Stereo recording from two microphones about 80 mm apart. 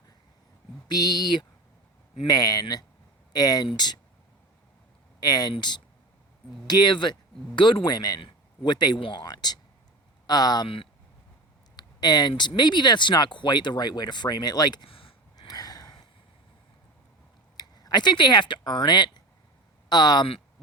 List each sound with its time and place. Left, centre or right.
0.9 s speech: left
3.7 s speech: left
5.2 s speech: left
8.2 s speech: left
11.8 s speech: left
17.6 s speech: left